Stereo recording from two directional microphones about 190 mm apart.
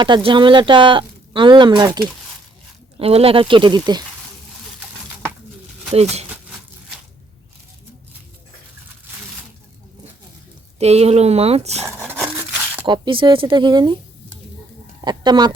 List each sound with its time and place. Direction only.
0.0 s speech: 25° right (ahead or behind)
3.0 s speech: 30° right (ahead or behind)
5.9 s speech: 35° right (ahead or behind)
10.8 s speech: 35° right (ahead or behind)
11.9 s a sound: 10° right (ahead or behind)
12.2 s scissors: 10° right (ahead or behind)
12.8 s speech: 25° right (ahead or behind)
15.0 s speech: 20° right (ahead or behind)